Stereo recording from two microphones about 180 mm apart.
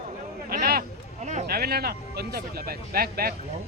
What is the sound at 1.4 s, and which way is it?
A man's voice, 60° right (ahead or behind).